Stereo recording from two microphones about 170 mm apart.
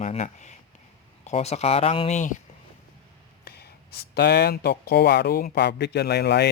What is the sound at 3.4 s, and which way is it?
Speech, 65° left (ahead or behind).